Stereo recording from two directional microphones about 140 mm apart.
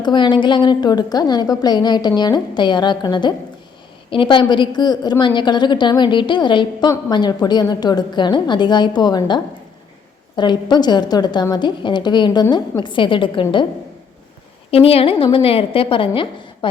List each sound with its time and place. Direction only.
0.0 s a woman's voice: 35° left (ahead or behind)
14.7 s a woman's voice: 45° left (ahead or behind)